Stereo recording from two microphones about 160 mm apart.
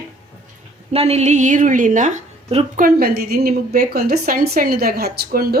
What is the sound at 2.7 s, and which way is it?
A woman's voice, 70° right (ahead or behind).